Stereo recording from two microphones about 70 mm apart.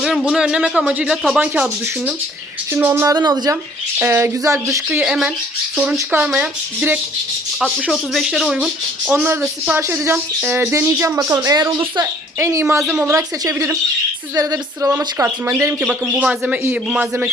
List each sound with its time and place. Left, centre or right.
0.0 s speech: centre
2.7 s speech: right
3.2 s speech: right
3.9 s speech: right
4.4 s speech: right
5.0 s speech: centre
6.1 s speech: right
8.2 s speech: centre
9.1 s speech: right
11.4 s a sound: right
12.4 s speech: right
14.3 s a sound: right
15.2 s speech: right
16.1 s speech: right